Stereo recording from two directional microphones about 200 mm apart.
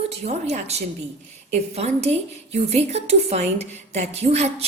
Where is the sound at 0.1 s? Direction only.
35° right (ahead or behind).